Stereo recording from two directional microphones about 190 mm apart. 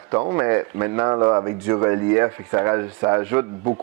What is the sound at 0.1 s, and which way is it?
Speech, 20° right (ahead or behind).